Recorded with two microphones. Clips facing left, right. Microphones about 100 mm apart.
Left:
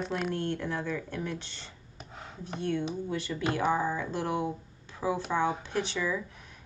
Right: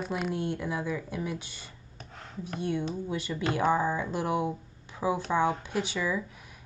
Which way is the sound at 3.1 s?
15° right (ahead or behind).